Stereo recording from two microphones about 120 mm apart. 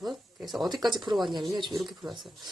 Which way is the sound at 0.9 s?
40° right (ahead or behind).